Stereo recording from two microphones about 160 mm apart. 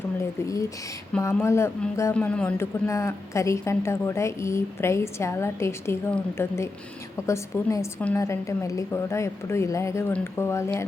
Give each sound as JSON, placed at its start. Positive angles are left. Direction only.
{"t": 0.2, "sound": "a woman's voice", "side_deg": 20}